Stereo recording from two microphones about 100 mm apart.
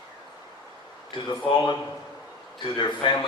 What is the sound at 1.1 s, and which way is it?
Speech, 50° left (ahead or behind).